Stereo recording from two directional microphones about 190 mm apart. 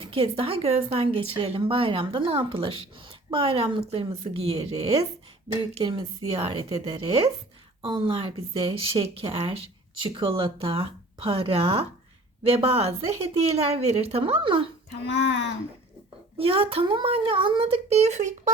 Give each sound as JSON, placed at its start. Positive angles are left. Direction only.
{"t": 0.0, "sound": "a woman's voice", "side_deg": -30}
{"t": 15.0, "sound": "a child's voice", "side_deg": 65}
{"t": 16.4, "sound": "speech", "side_deg": -30}